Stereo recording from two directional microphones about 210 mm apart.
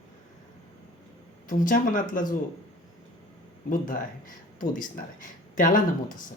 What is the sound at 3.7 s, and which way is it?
Speech, 40° left (ahead or behind).